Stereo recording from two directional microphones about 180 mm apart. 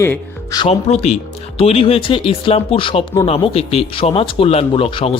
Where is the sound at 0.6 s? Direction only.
35° left (ahead or behind).